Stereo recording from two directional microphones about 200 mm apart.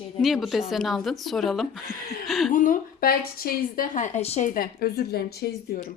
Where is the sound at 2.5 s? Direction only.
40° left (ahead or behind).